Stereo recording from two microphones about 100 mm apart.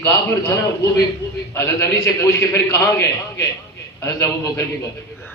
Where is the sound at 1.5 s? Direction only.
30° left (ahead or behind).